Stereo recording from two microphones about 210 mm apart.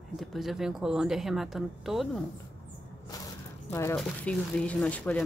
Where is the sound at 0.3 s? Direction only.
Centre (ahead or behind).